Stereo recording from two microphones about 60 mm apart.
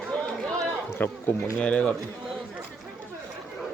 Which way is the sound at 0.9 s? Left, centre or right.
Left.